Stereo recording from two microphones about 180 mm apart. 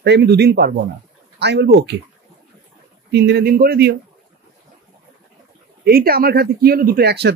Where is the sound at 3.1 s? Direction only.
70° right (ahead or behind).